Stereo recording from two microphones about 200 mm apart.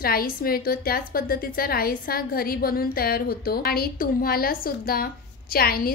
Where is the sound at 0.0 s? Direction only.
50° left (ahead or behind).